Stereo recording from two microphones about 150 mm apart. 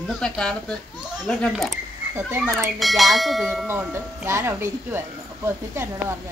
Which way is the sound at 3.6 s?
15° right (ahead or behind).